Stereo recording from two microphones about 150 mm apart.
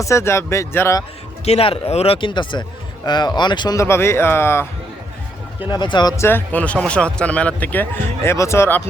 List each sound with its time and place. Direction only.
0.0 s a man's voice: 20° left (ahead or behind)
1.5 s a man's voice: 40° left (ahead or behind); by 4.6 s 15° left (ahead or behind)
5.6 s speech: 30° left (ahead or behind)